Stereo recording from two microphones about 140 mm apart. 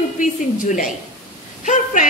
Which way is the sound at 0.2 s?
65° left (ahead or behind).